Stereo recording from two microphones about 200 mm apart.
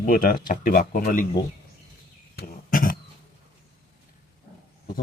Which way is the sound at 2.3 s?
45° left (ahead or behind).